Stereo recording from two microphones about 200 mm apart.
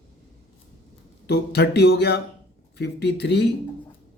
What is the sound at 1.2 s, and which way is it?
Speech, 55° left (ahead or behind).